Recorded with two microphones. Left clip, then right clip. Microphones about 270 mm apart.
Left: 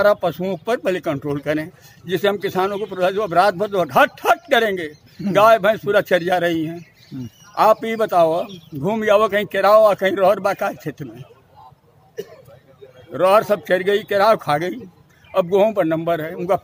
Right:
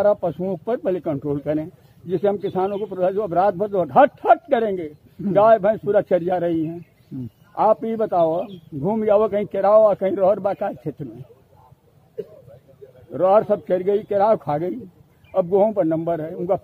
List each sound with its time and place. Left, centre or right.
0.0 s speech: centre
13.1 s a man's voice: centre